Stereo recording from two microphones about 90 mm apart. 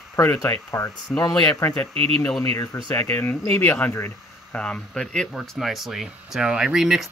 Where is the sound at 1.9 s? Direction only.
90° right.